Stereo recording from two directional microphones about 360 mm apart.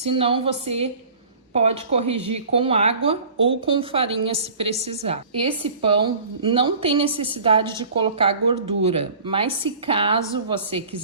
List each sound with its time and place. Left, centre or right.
0.0 s speech: centre